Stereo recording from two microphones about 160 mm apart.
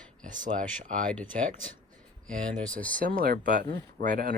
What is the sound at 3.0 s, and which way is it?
Speech, 60° right (ahead or behind).